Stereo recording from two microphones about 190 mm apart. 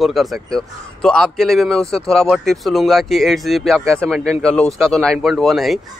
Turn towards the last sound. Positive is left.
turn(degrees=0)  # may be behind; listen again after turning